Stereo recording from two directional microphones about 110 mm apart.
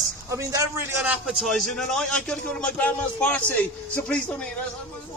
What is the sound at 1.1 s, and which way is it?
A man's voice, 5° right (ahead or behind).